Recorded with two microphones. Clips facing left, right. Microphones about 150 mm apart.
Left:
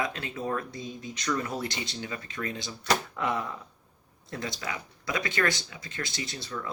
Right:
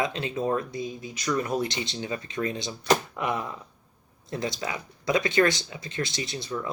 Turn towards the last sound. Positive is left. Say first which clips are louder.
# right 4 dB
turn(degrees=-20)  # may be behind; listen again after turning